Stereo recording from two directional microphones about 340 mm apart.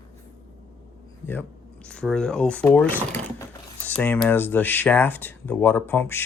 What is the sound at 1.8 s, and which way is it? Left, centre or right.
Speech, centre.